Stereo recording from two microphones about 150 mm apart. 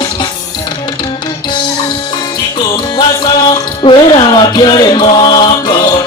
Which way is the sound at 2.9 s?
30° left (ahead or behind).